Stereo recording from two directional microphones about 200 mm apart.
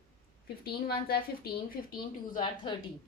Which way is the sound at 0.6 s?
50° left (ahead or behind).